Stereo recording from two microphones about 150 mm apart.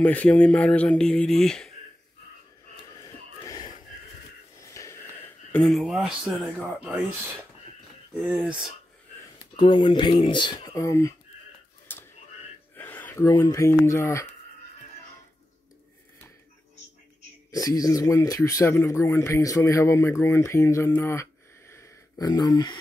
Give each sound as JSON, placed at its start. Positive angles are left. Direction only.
{"t": 0.0, "sound": "speech", "side_deg": 10}
{"t": 3.0, "sound": "a sound", "side_deg": 25}
{"t": 4.6, "sound": "wheeze", "side_deg": 20}
{"t": 5.5, "sound": "speech", "side_deg": 5}
{"t": 8.2, "sound": "speech", "side_deg": -5}
{"t": 9.6, "sound": "speech", "side_deg": 30}
{"t": 11.9, "sound": "a sound", "side_deg": 15}
{"t": 13.3, "sound": "speech", "side_deg": 20}
{"t": 17.5, "sound": "speech", "side_deg": 25}